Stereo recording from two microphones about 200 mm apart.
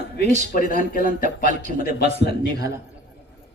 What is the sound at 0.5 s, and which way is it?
Speech, 45° left (ahead or behind).